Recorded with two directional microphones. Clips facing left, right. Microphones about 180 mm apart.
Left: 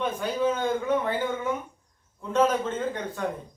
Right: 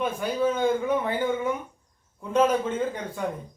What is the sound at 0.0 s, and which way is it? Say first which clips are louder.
A man's voice: right 1 dB; 10° right (ahead or behind).